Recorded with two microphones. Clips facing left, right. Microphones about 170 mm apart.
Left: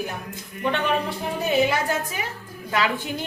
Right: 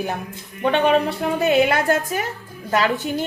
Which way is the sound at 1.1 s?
70° right (ahead or behind).